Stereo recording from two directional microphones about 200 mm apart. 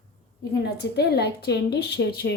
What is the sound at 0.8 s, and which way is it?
A woman's voice, 55° left (ahead or behind).